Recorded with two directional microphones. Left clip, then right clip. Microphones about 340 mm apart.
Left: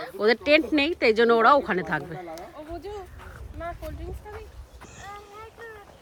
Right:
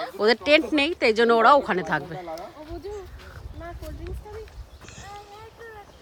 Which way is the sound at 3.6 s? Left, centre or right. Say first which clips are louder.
Left 4 dB; left.